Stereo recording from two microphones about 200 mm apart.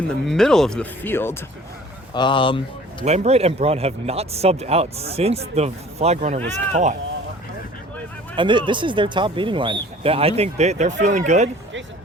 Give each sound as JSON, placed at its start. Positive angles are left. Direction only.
{"t": 0.1, "sound": "speech", "side_deg": 5}
{"t": 2.1, "sound": "speech", "side_deg": 25}
{"t": 3.0, "sound": "speech", "side_deg": -35}
{"t": 8.4, "sound": "speech", "side_deg": -25}